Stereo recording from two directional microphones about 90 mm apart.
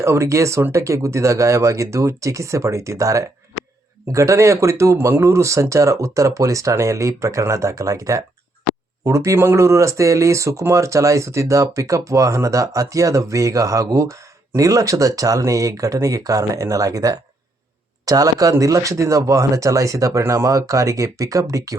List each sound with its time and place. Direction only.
0.0 s speech: 35° right (ahead or behind)